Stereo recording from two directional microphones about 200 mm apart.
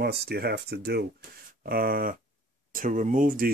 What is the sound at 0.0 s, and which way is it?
Speech, 50° right (ahead or behind).